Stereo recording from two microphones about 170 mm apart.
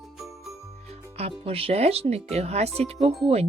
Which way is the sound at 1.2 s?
35° right (ahead or behind).